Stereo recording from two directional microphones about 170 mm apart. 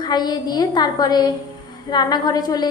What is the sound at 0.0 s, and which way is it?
A woman's voice, 25° left (ahead or behind).